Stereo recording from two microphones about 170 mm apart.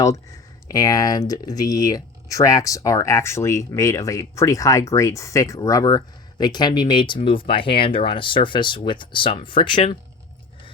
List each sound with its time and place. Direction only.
0.7 s speech: 20° left (ahead or behind)